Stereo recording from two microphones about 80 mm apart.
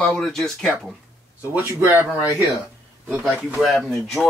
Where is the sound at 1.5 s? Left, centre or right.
Right.